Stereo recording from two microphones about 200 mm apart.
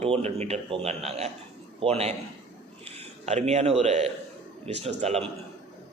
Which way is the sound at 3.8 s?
35° right (ahead or behind).